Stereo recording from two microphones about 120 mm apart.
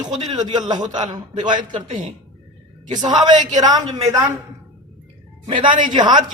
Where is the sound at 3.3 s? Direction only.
85° right.